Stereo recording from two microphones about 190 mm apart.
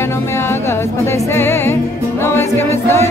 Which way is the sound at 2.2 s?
15° left (ahead or behind).